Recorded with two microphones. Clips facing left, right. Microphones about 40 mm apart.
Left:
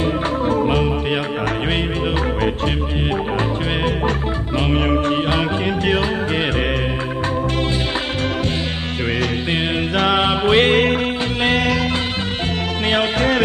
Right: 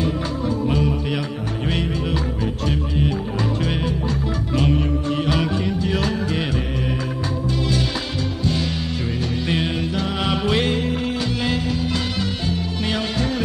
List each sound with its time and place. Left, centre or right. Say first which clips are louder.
0.0 s music: left 4 dB; left
5.1 s music: left 3 dB; left
9.9 s music: left 8 dB; left
10.2 s music: left 2 dB; left
12.9 s music: left 8 dB; left